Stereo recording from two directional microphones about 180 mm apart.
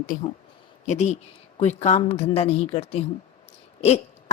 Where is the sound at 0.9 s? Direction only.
40° left (ahead or behind).